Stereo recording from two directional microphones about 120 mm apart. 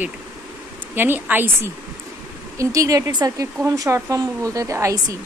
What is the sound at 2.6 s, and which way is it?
Speech, 25° right (ahead or behind).